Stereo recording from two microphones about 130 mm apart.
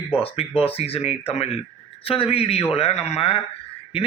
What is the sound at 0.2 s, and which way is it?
A man's voice, 50° left (ahead or behind).